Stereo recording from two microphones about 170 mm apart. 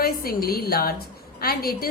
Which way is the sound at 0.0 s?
60° left (ahead or behind).